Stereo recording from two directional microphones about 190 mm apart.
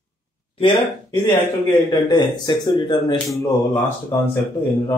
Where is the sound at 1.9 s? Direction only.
25° left (ahead or behind).